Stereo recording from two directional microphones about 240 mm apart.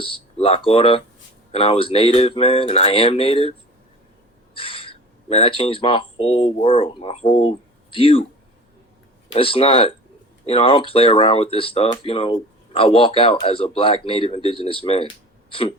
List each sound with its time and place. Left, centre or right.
0.0 s speech: left
4.5 s speech: left
9.3 s speech: left
15.4 s a sound: left